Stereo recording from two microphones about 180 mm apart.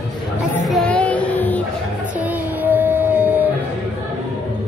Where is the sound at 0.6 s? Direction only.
5° left (ahead or behind).